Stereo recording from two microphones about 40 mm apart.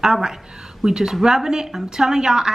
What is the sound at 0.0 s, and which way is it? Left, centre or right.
A woman's voice, centre.